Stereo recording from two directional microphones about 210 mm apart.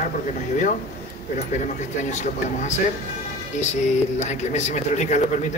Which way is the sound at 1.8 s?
35° left (ahead or behind).